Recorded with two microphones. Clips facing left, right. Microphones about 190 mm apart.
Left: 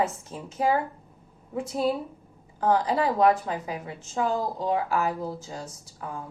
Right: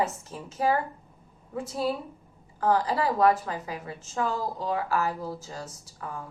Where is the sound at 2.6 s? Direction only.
20° left (ahead or behind).